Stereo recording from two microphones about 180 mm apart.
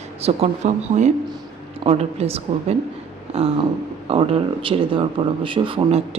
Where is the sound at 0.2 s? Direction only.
35° right (ahead or behind).